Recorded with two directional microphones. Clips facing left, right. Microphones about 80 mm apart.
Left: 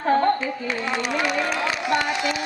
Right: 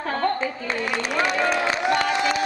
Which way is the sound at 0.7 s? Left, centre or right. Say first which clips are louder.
Left 1 dB; right.